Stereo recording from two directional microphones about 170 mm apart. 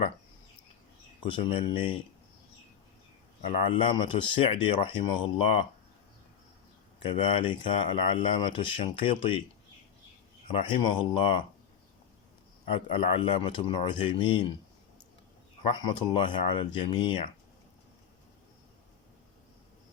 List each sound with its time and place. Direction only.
1.2 s speech: 30° left (ahead or behind)
3.4 s speech: 30° left (ahead or behind)
7.0 s speech: 30° left (ahead or behind)
10.5 s speech: 30° left (ahead or behind)
12.6 s speech: 30° left (ahead or behind)
15.6 s speech: 25° left (ahead or behind)